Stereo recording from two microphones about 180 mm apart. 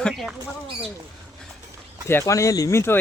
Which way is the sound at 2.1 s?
15° left (ahead or behind).